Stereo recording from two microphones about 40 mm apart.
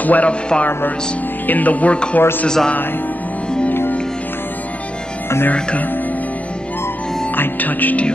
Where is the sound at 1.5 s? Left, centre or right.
Left.